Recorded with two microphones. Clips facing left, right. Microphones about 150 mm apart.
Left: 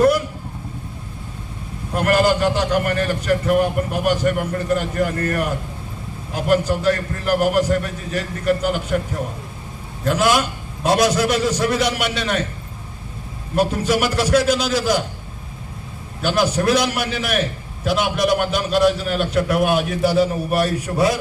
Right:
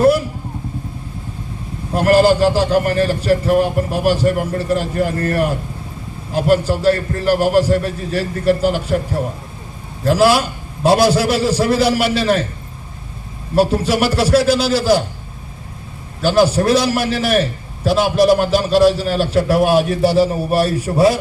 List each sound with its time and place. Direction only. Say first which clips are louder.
2.0 s a man's voice: right 5 dB; 30° right (ahead or behind)
13.6 s a man's voice: right 4 dB; 30° right (ahead or behind)
16.2 s a man's voice: right 5 dB; 30° right (ahead or behind)